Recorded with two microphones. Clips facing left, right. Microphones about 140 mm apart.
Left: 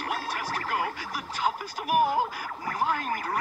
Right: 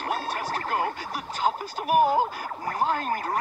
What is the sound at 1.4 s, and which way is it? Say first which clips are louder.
Speech: right 3 dB; 25° right (ahead or behind).